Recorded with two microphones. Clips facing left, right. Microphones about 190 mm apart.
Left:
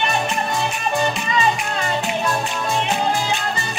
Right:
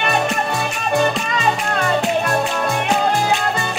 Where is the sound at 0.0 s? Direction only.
60° right (ahead or behind).